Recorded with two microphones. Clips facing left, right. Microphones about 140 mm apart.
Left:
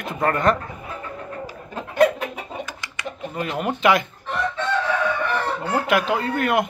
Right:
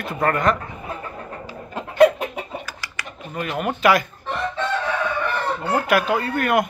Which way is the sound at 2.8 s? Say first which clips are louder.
Left 4 dB; 25° left (ahead or behind).